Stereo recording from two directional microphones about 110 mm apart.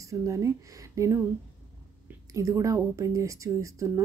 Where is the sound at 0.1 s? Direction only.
30° right (ahead or behind).